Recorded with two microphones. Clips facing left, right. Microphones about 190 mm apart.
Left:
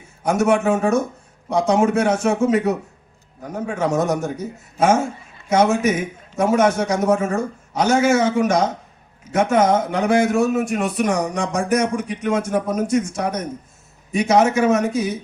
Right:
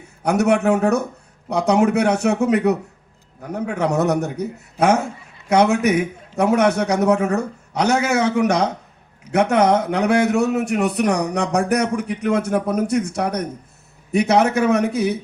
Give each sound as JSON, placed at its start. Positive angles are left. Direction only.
{"t": 0.2, "sound": "a man's voice", "side_deg": -65}